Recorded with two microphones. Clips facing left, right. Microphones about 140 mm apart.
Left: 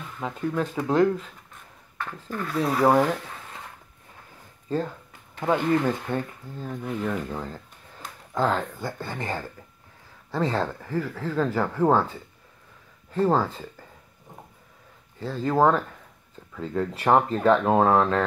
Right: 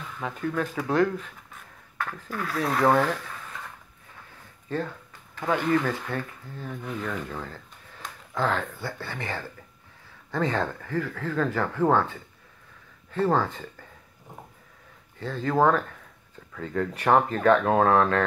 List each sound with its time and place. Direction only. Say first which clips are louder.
0.2 s speech: left 2 dB; 20° left (ahead or behind)
2.2 s speech: left 3 dB; 5° right (ahead or behind); by 3.3 s 15° left (ahead or behind)
5.4 s speech: left 2 dB; 20° left (ahead or behind)
7.3 s speech: left 3 dB; 25° left (ahead or behind)
8.0 s speech: left 3 dB; 15° left (ahead or behind)
10.5 s speech: left 1 dB; 5° left (ahead or behind)
15.1 s speech: left 1 dB; 10° left (ahead or behind)